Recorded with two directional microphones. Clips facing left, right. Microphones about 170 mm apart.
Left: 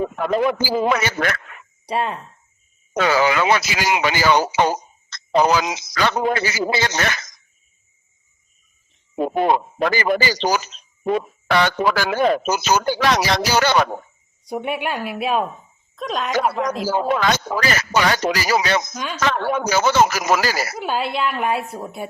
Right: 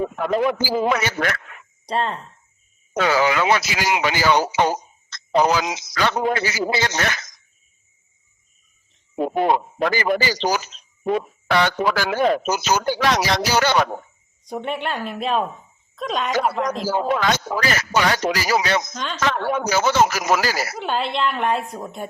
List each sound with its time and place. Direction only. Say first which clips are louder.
0.2 s speech: left 1 dB; 90° left
1.9 s speech: left 1 dB; 10° left (ahead or behind)
2.9 s speech: left 1 dB; 90° left
9.2 s speech: left 1 dB; 90° left
14.4 s a woman's voice: left 2 dB; 10° left (ahead or behind)
17.2 s speech: left 1 dB; 90° left
18.9 s speech: left 1 dB; 10° left (ahead or behind)
19.2 s speech: left 1 dB; 90° left
20.7 s a woman's voice: left 1 dB; 5° left (ahead or behind)